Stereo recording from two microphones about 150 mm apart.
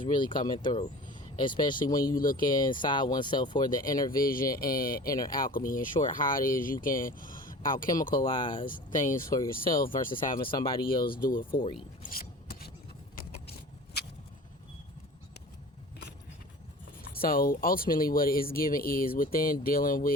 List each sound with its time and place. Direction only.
0.0 s speech: 30° left (ahead or behind)
2.1 s speech: 70° left (ahead or behind)
2.4 s speech: 30° left (ahead or behind)
4.1 s speech: 70° left (ahead or behind)
8.2 s speech: 35° left (ahead or behind)
8.6 s speech: 65° left (ahead or behind)
10.4 s speech: 35° left (ahead or behind)
11.0 s speech: 75° left (ahead or behind)
12.1 s rub: 90° left
17.0 s speech: 80° left